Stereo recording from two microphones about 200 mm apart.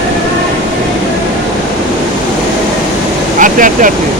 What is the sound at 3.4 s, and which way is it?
Vehicle, 40° right (ahead or behind).